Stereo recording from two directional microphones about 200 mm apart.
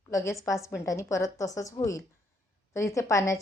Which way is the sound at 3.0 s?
15° left (ahead or behind).